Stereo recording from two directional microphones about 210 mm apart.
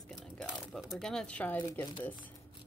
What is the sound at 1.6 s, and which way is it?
Speech, 15° left (ahead or behind).